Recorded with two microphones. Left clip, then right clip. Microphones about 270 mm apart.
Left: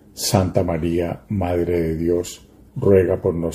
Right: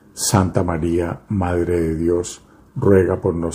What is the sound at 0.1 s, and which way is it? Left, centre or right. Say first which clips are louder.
Speech: even; centre.